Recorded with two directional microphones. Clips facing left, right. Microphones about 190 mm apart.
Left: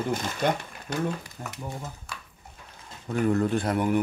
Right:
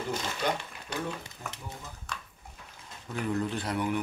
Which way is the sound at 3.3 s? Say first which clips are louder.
Left 6 dB; 50° left (ahead or behind).